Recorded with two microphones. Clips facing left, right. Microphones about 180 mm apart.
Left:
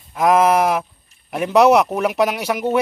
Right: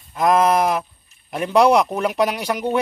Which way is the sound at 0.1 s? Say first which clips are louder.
Left 2 dB; 10° left (ahead or behind).